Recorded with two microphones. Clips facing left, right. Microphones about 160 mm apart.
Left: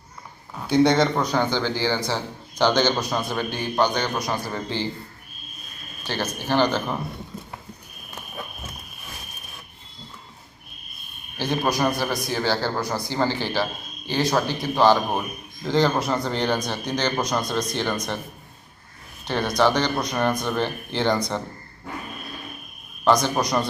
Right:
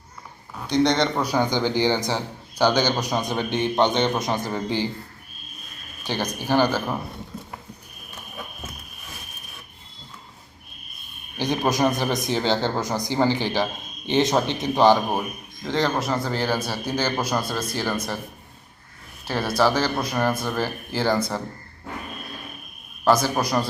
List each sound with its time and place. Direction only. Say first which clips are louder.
0.7 s speech: left 2 dB; 10° left (ahead or behind)
1.2 s a man's voice: right 1 dB; 10° right (ahead or behind)
6.1 s a man's voice: right 1 dB; 15° right (ahead or behind)
11.3 s a man's voice: right 1 dB; 15° right (ahead or behind)
15.6 s speech: left 2 dB; centre (ahead or behind)
19.2 s speech: left 1 dB; 5° right (ahead or behind)
23.0 s speech: even; 5° right (ahead or behind)